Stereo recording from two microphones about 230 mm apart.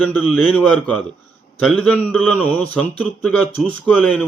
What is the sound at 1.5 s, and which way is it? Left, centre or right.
A man's voice, centre.